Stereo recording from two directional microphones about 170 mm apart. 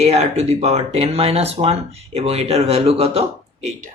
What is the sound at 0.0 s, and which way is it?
Speech, 40° right (ahead or behind).